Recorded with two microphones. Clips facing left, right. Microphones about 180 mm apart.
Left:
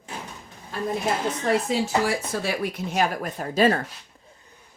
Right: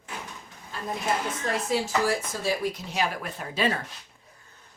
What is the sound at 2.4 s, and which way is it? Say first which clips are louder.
Speech: left 1 dB; 65° left (ahead or behind).